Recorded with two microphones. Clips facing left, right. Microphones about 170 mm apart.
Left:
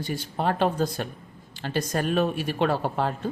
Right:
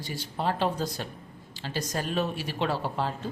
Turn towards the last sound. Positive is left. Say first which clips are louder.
# left 4 dB
turn(degrees=55)  # may be behind; listen again after turning